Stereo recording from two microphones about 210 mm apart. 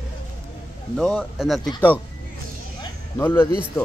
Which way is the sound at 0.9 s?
5° left (ahead or behind).